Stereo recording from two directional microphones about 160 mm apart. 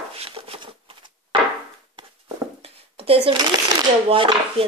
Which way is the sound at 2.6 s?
35° right (ahead or behind).